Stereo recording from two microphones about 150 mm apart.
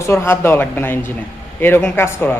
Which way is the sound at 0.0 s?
20° left (ahead or behind).